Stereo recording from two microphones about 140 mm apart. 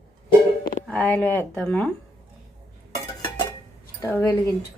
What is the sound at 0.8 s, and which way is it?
Speech, 10° left (ahead or behind).